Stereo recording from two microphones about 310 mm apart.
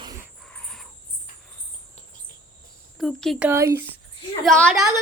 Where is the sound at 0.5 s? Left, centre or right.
Centre.